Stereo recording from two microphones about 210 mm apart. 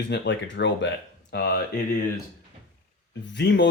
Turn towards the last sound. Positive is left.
turn(degrees=55)  # may be behind; listen again after turning